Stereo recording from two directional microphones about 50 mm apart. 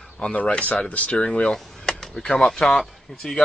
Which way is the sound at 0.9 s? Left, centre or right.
Left.